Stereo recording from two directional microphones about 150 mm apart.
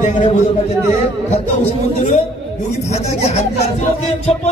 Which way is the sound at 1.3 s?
45° left (ahead or behind).